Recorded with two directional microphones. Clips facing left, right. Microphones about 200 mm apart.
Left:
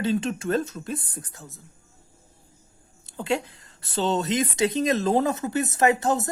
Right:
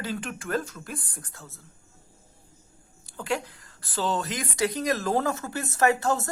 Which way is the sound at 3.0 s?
25° left (ahead or behind).